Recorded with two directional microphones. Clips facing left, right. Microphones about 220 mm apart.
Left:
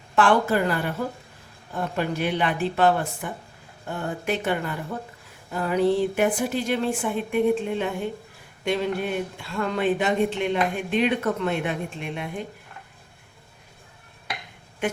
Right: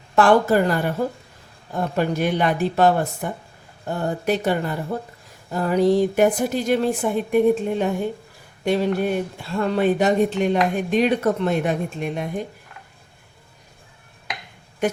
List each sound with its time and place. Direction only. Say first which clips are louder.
0.2 s speech: right 4 dB; 40° right (ahead or behind)
2.0 s a woman's voice: right 4 dB; 45° right (ahead or behind)